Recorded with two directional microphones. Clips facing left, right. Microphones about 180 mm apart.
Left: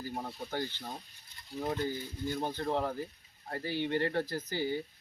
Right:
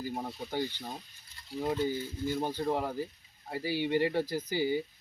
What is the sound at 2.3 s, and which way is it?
Speech, 10° right (ahead or behind).